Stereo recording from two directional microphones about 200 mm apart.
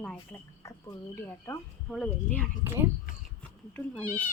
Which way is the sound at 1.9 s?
5° left (ahead or behind).